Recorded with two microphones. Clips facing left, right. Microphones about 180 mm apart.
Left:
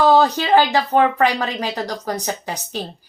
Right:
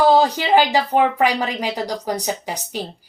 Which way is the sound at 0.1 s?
10° right (ahead or behind).